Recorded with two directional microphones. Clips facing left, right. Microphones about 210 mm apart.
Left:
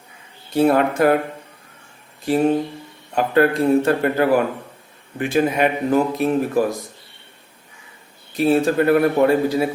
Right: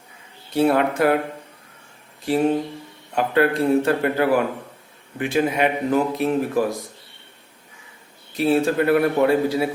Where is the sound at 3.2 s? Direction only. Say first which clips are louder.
Left 2 dB; 45° left (ahead or behind).